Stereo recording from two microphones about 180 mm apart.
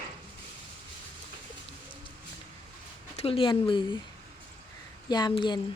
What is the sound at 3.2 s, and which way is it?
Speech, 30° left (ahead or behind).